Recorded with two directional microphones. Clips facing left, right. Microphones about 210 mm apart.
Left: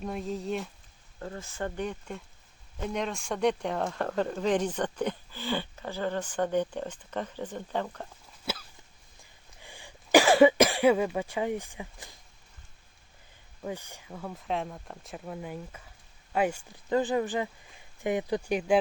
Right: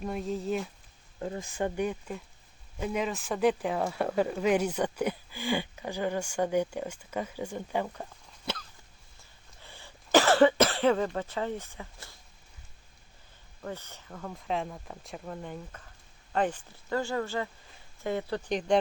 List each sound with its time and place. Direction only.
0.0 s speech: centre (ahead or behind)
1.2 s speech: 15° right (ahead or behind)
8.5 s hiccup: 5° left (ahead or behind)
9.6 s cough: 15° left (ahead or behind)
13.6 s speech: 10° left (ahead or behind)